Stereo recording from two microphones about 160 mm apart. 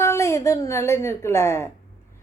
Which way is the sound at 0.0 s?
15° left (ahead or behind).